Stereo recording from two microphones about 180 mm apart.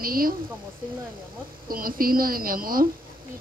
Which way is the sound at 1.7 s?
55° right (ahead or behind).